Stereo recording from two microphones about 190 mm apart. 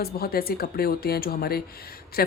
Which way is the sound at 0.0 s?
55° left (ahead or behind).